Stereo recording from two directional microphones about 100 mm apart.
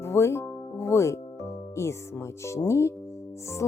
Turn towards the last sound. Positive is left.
turn(degrees=25)  # may be behind; listen again after turning